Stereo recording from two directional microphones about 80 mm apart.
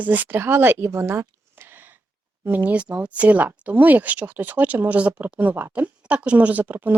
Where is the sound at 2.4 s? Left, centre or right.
Right.